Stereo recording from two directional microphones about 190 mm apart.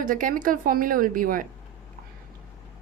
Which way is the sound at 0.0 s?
45° right (ahead or behind).